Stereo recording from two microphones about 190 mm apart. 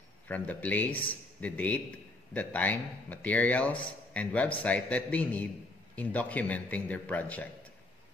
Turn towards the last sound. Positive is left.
turn(degrees=10)  # may be behind; listen again after turning